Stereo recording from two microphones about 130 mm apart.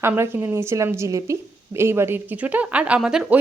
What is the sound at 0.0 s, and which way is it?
A woman's voice, 20° right (ahead or behind).